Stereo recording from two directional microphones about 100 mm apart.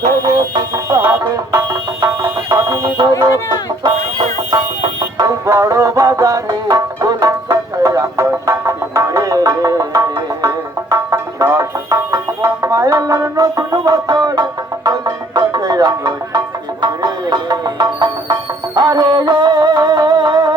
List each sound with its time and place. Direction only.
0.5 s music: 35° right (ahead or behind)
3.0 s speech: 45° right (ahead or behind)
5.1 s music: 35° right (ahead or behind)